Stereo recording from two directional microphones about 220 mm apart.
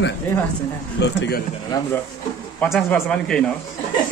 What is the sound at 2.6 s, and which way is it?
Speech, 5° left (ahead or behind).